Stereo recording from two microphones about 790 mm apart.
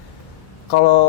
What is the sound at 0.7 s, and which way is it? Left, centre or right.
Speech, left.